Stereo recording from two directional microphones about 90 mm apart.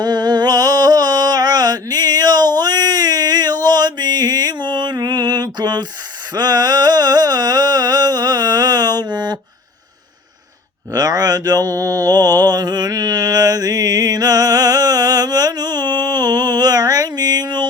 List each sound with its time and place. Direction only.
0.0 s mantra: 50° right (ahead or behind)
6.3 s music: 50° right (ahead or behind)
10.9 s mantra: 45° right (ahead or behind)